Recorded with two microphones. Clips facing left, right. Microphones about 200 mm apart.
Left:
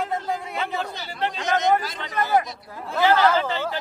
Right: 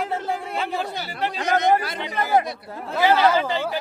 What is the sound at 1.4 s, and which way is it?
Speech, 60° right (ahead or behind).